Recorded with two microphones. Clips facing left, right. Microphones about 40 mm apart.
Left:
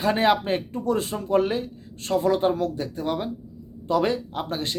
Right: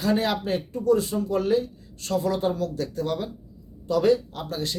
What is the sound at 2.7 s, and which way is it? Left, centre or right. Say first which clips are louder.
Speech: even; left.